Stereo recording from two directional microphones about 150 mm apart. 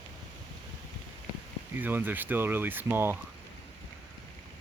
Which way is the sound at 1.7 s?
15° right (ahead or behind).